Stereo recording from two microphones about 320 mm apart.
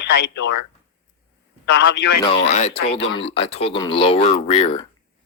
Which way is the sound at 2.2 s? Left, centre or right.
Centre.